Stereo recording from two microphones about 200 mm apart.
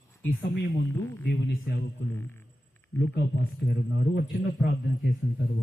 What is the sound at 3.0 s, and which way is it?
A man's voice, 55° left (ahead or behind).